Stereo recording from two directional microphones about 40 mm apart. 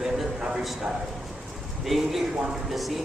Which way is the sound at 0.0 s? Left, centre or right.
Centre.